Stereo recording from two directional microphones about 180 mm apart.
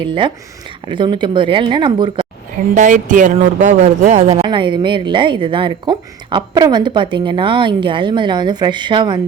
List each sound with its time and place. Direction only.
0.0 s a woman's voice: 25° right (ahead or behind)
2.7 s speech: 45° right (ahead or behind)
4.4 s a woman's voice: 25° right (ahead or behind)